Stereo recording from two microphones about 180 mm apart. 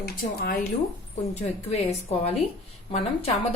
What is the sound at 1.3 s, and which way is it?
A woman's voice, 40° left (ahead or behind).